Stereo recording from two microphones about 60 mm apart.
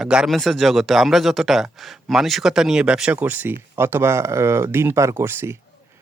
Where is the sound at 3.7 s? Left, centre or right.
Right.